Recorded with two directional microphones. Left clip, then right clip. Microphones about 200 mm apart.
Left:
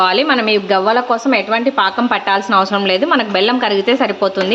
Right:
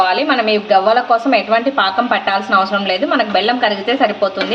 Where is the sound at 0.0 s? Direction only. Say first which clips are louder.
Left 1 dB; 40° left (ahead or behind).